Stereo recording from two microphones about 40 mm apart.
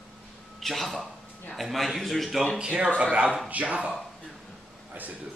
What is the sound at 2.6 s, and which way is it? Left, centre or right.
Speech, right.